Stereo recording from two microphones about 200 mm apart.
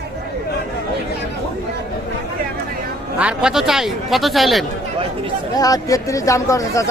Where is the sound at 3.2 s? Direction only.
5° right (ahead or behind).